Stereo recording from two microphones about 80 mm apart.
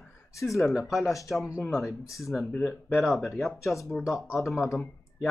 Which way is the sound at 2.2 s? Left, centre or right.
Centre.